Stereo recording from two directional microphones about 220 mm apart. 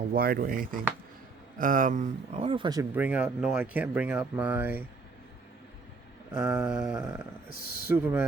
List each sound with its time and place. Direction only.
0.1 s speech: 45° right (ahead or behind); by 4.8 s 10° right (ahead or behind)
6.3 s a sound: 5° right (ahead or behind)
7.9 s speech: 10° right (ahead or behind)